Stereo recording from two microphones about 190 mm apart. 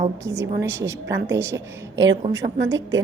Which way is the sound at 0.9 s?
75° right (ahead or behind).